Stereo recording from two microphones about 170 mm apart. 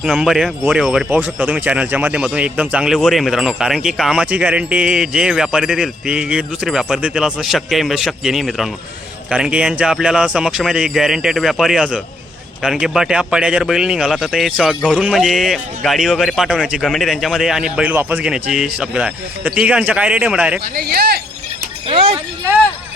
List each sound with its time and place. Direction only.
0.0 s speech: 5° right (ahead or behind)
20.7 s speech: 65° right (ahead or behind)
21.8 s speech: 35° right (ahead or behind)